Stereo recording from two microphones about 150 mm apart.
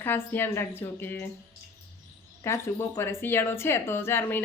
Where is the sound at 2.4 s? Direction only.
15° left (ahead or behind).